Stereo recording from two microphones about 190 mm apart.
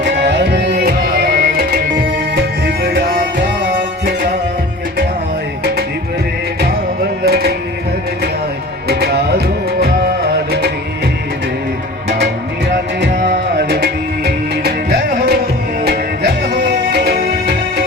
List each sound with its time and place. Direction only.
0.0 s music: 65° right (ahead or behind)
7.3 s music: 55° right (ahead or behind)
8.9 s tabla: 55° right (ahead or behind)
9.8 s music: 60° right (ahead or behind)
12.0 s music: 65° right (ahead or behind)